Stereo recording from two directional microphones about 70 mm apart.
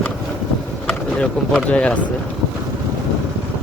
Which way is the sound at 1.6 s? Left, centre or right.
Centre.